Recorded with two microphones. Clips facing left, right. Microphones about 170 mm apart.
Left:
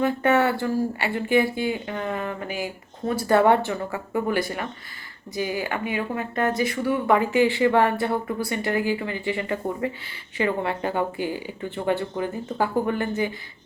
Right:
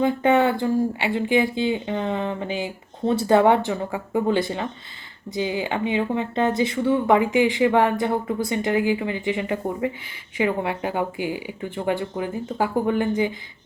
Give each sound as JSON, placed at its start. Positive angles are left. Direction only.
{"t": 0.0, "sound": "speech", "side_deg": -15}